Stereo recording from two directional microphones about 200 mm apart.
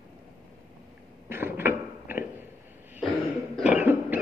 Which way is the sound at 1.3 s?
10° right (ahead or behind).